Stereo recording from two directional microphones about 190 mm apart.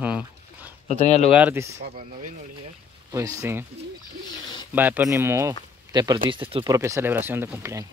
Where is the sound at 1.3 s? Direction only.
10° right (ahead or behind).